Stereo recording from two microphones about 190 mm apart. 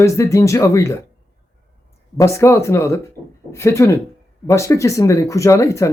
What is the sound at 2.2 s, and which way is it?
Speech, 15° left (ahead or behind).